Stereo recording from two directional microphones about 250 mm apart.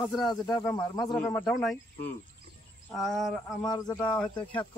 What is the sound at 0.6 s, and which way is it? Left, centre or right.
Speech, centre.